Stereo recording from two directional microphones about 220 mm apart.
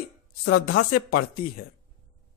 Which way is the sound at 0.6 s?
40° left (ahead or behind).